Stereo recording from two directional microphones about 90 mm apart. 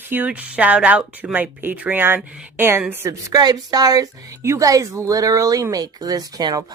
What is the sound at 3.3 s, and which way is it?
Speech, 45° right (ahead or behind).